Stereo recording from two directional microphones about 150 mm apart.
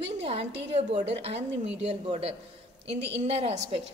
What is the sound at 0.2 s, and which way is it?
A woman's voice, 40° right (ahead or behind).